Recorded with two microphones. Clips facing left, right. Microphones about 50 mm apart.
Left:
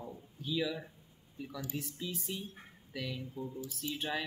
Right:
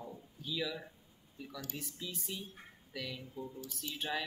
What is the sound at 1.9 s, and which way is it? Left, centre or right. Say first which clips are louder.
Speech: left 4 dB; centre.